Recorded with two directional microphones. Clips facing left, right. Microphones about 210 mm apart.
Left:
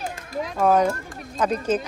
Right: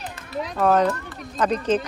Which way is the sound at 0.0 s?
45° left (ahead or behind).